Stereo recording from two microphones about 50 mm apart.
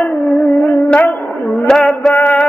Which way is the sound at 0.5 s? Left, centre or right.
Left.